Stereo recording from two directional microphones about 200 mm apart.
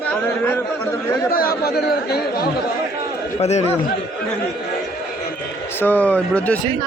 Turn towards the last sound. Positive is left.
turn(degrees=5)  # may be behind; listen again after turning